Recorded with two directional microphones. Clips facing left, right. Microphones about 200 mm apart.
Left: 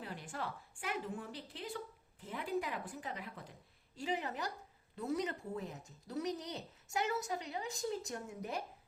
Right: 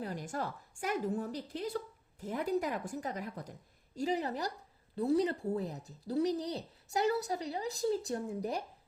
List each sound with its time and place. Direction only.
0.0 s a woman's voice: 40° right (ahead or behind)